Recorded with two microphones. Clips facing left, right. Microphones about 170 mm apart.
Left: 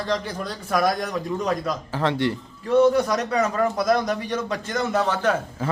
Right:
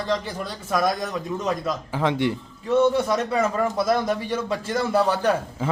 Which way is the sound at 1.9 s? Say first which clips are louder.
Even; 15° right (ahead or behind).